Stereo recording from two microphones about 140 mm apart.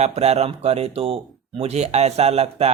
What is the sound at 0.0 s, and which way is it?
Speech, 50° right (ahead or behind).